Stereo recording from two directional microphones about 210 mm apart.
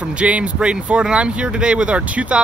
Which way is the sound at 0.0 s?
5° right (ahead or behind).